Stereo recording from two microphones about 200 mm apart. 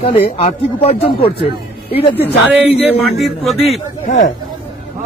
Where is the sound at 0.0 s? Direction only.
30° left (ahead or behind).